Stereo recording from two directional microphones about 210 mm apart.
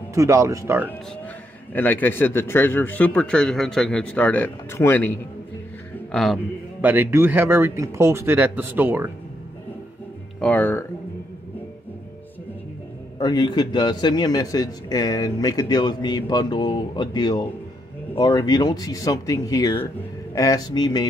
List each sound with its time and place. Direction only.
0.1 s a man's voice: 15° right (ahead or behind)
1.7 s speech: 10° left (ahead or behind)
6.1 s a man's voice: centre (ahead or behind)
10.4 s speech: 10° left (ahead or behind)
13.2 s speech: 20° left (ahead or behind)